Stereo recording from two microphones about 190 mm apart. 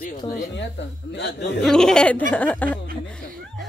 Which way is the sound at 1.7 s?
5° left (ahead or behind).